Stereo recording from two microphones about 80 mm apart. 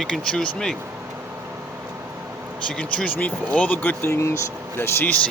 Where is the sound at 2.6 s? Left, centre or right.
Centre.